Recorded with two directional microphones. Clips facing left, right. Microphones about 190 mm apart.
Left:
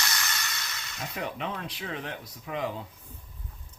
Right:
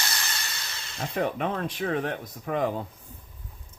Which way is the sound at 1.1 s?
50° right (ahead or behind).